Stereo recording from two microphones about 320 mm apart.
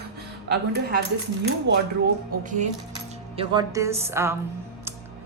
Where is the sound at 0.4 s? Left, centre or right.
Right.